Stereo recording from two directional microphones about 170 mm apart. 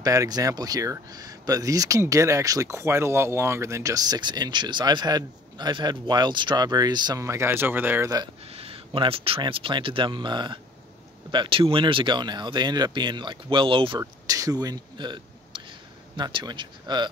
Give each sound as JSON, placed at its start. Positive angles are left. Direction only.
{"t": 0.0, "sound": "speech", "side_deg": -20}
{"t": 8.5, "sound": "speech", "side_deg": -35}